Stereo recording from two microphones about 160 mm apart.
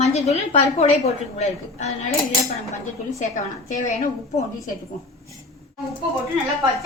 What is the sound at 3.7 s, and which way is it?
Speech, 50° left (ahead or behind).